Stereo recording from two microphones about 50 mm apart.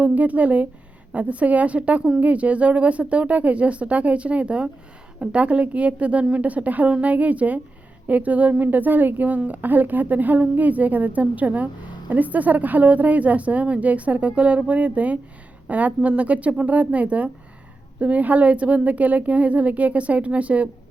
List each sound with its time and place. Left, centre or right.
0.0 s a woman's voice: right